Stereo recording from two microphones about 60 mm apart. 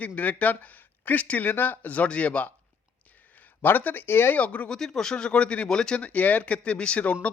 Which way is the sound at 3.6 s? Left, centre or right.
Left.